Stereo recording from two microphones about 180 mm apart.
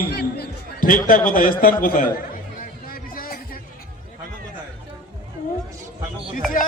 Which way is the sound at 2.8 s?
55° left (ahead or behind).